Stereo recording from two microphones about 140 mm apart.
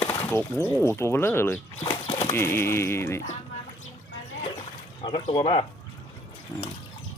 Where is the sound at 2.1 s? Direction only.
50° left (ahead or behind).